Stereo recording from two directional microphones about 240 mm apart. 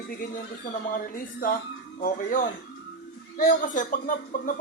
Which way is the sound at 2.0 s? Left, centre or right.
Left.